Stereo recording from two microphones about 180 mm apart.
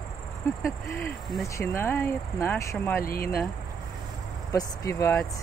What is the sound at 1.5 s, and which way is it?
Speech, 15° left (ahead or behind).